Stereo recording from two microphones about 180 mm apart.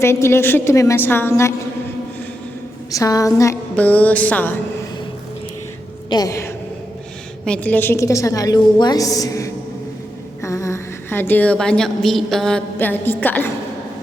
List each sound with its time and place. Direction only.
0.0 s a woman's voice: 15° left (ahead or behind)
2.9 s a woman's voice: 20° left (ahead or behind)
6.1 s a woman's voice: 20° left (ahead or behind)